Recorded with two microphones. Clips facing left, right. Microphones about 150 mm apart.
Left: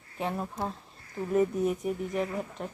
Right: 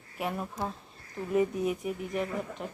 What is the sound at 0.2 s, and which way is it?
Speech, 25° left (ahead or behind).